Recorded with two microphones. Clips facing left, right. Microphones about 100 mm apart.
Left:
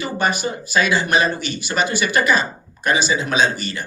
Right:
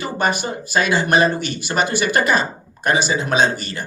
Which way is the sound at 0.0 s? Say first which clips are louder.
Even; 50° right (ahead or behind).